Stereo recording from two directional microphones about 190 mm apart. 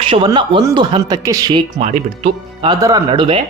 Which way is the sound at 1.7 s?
35° right (ahead or behind).